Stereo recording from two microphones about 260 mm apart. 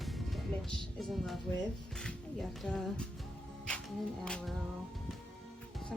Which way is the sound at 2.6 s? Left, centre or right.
Centre.